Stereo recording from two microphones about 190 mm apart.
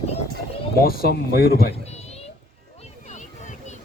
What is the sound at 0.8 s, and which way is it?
Speech, 50° left (ahead or behind).